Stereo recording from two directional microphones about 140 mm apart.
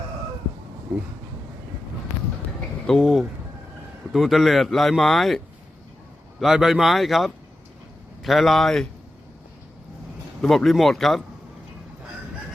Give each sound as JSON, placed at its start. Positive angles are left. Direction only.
{"t": 2.8, "sound": "speech", "side_deg": 0}
{"t": 6.4, "sound": "speech", "side_deg": 0}
{"t": 10.4, "sound": "speech", "side_deg": 0}